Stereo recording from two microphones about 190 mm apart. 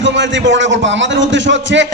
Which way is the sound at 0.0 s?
70° right (ahead or behind).